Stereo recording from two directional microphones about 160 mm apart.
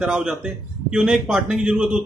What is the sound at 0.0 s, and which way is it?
A man's voice, 5° right (ahead or behind).